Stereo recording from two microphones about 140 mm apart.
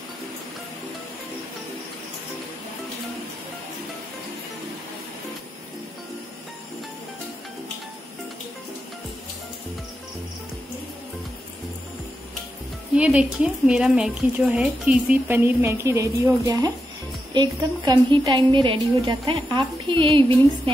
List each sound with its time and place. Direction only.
12.9 s speech: 10° right (ahead or behind)
17.3 s a woman's voice: 30° right (ahead or behind)